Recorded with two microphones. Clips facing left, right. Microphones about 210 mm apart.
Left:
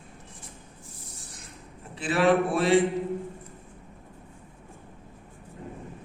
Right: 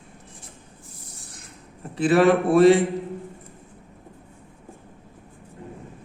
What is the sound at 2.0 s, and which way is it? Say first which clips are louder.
Speech: right 5 dB; 50° right (ahead or behind).